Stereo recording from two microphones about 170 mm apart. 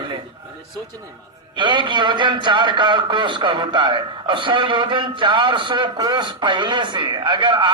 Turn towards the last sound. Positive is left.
turn(degrees=-30)  # may be behind; listen again after turning